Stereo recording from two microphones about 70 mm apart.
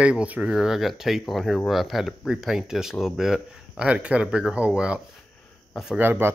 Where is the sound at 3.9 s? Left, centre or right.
Centre.